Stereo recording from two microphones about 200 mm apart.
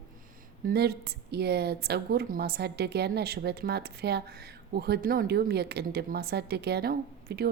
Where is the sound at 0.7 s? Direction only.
55° right (ahead or behind).